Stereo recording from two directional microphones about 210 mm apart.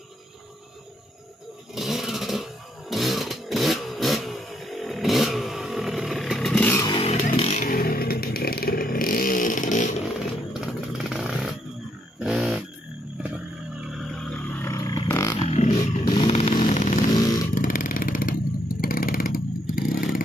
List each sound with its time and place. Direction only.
1.8 s a sound: centre (ahead or behind)
6.9 s music: 25° left (ahead or behind)
7.2 s vehicle: 35° left (ahead or behind)
10.5 s motorcycle: 5° right (ahead or behind)
12.2 s a sound: centre (ahead or behind)
13.7 s a sound: centre (ahead or behind); by 15.3 s 15° left (ahead or behind)
15.3 s motorcycle: 30° left (ahead or behind)
17.1 s motorcycle: 20° left (ahead or behind)
17.6 s vehicle: 40° left (ahead or behind)